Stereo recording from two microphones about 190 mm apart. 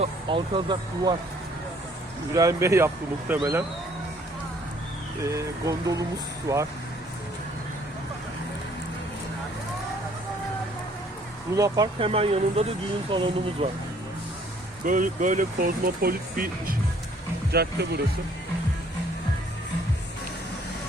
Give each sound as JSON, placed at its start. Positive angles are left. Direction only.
{"t": 0.0, "sound": "speech", "side_deg": -25}
{"t": 2.3, "sound": "speech", "side_deg": -15}
{"t": 5.2, "sound": "speech", "side_deg": -15}
{"t": 11.5, "sound": "speech", "side_deg": -15}
{"t": 11.9, "sound": "speech", "side_deg": -30}
{"t": 14.8, "sound": "speech", "side_deg": -45}